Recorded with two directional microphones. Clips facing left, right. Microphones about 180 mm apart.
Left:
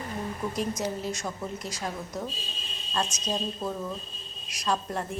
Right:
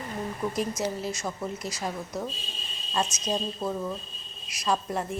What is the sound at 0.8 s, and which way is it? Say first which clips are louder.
A woman's voice: right 1 dB; centre (ahead or behind).